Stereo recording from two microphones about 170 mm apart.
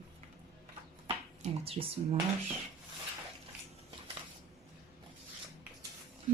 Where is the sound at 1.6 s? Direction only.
35° right (ahead or behind).